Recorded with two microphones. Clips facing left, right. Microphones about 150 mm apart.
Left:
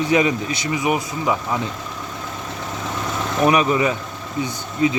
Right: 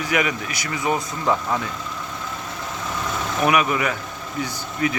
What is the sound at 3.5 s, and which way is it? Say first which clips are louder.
Speech: left 3 dB; 30° left (ahead or behind).